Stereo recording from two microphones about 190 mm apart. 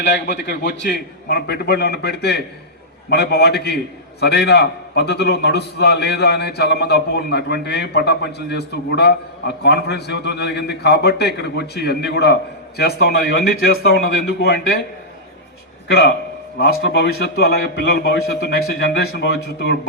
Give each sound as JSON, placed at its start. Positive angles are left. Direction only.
{"t": 0.0, "sound": "a man's voice", "side_deg": 65}
{"t": 15.9, "sound": "a man's voice", "side_deg": 55}